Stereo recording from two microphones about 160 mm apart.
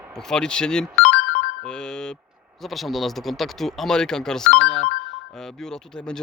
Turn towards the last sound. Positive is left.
turn(degrees=5)  # may be behind; listen again after turning